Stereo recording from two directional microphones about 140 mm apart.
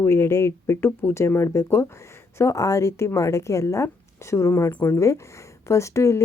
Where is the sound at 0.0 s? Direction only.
20° left (ahead or behind).